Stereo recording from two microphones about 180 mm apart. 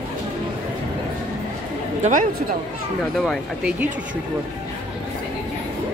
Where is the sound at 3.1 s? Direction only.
Centre (ahead or behind).